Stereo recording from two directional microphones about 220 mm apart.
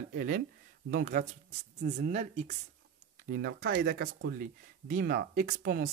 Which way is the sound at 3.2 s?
45° right (ahead or behind).